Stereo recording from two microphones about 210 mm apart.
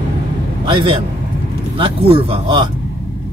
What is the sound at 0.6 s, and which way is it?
A man's voice, 25° right (ahead or behind).